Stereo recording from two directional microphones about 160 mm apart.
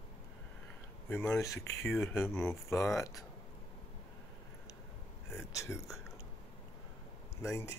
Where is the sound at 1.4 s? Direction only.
20° left (ahead or behind).